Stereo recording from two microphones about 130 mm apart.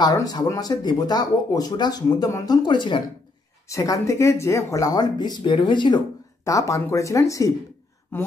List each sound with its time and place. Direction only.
0.0 s speech: 30° left (ahead or behind)
3.6 s speech: 25° left (ahead or behind)
6.4 s speech: 25° left (ahead or behind)